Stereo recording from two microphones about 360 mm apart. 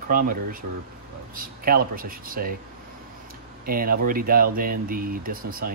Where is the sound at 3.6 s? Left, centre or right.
Right.